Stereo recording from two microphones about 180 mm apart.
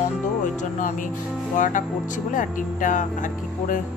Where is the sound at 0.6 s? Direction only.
45° left (ahead or behind).